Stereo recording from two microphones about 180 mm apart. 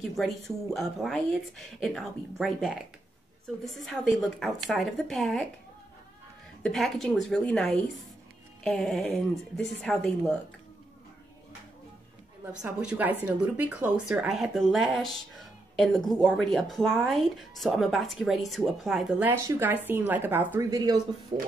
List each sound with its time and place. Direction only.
0.2 s speech: centre (ahead or behind)
6.6 s speech: centre (ahead or behind)
12.6 s speech: 10° right (ahead or behind)